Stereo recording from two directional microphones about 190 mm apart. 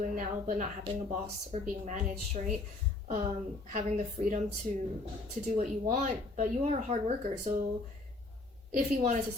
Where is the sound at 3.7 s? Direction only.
40° right (ahead or behind).